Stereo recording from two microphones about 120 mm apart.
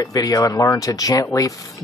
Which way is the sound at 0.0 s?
30° left (ahead or behind).